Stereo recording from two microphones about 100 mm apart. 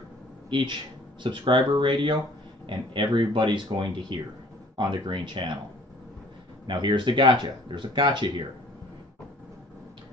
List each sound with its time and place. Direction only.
0.5 s a man's voice: 55° right (ahead or behind)
6.7 s speech: 55° right (ahead or behind)